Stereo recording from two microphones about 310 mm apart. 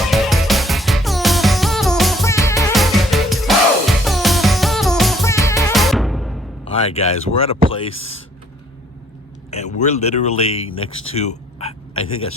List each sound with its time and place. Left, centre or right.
0.0 s music: centre
6.7 s speech: centre
9.5 s speech: left